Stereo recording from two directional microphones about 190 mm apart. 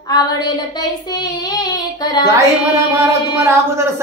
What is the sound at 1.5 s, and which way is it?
Female singing, 20° left (ahead or behind).